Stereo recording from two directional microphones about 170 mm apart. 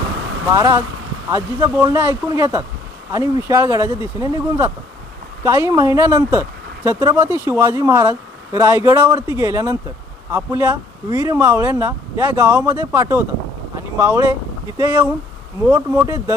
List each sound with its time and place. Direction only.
0.5 s speech: 20° right (ahead or behind)